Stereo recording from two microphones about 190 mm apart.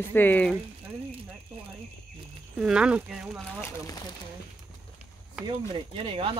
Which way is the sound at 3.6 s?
15° left (ahead or behind).